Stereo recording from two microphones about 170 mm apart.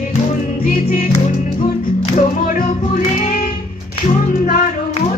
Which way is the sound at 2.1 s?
50° left (ahead or behind).